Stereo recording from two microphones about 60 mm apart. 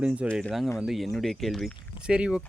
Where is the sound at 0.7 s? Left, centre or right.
Centre.